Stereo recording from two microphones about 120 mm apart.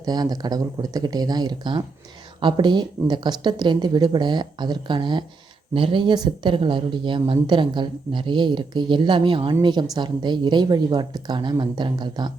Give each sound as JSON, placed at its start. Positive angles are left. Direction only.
{"t": 0.0, "sound": "a woman's voice", "side_deg": -35}